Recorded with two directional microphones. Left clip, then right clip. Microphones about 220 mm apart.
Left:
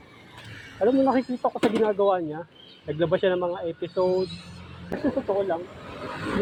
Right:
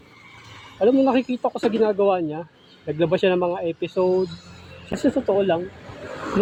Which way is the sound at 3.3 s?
35° right (ahead or behind).